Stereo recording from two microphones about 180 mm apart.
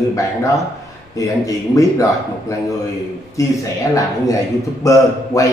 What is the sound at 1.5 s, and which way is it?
Speech, 20° left (ahead or behind).